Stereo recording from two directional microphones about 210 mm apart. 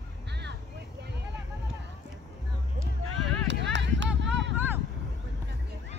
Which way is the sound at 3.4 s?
60° right (ahead or behind).